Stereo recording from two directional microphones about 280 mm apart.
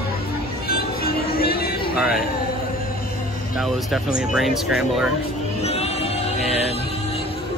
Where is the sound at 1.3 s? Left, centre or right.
Left.